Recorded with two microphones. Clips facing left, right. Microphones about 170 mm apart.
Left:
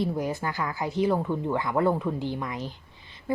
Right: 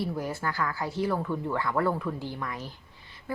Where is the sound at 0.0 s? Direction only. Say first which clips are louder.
Left 3 dB; 20° left (ahead or behind).